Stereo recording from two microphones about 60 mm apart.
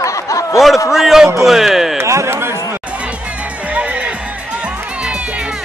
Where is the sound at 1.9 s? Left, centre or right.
Right.